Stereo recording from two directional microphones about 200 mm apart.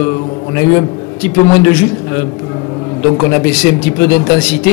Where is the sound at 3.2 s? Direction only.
15° left (ahead or behind).